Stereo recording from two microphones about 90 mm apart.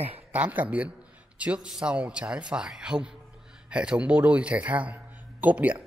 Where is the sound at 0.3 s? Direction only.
15° right (ahead or behind).